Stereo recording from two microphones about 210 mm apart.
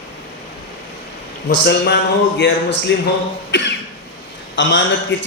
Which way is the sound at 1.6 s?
50° left (ahead or behind).